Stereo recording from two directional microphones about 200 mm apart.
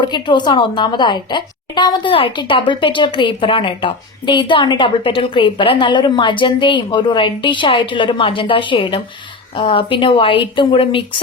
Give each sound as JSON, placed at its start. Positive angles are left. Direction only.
{"t": 0.0, "sound": "a woman's voice", "side_deg": 20}